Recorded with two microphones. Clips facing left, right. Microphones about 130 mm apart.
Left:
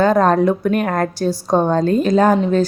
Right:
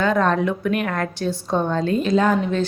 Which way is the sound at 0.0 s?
40° left (ahead or behind).